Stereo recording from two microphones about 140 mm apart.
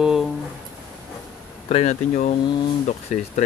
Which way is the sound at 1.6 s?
55° left (ahead or behind).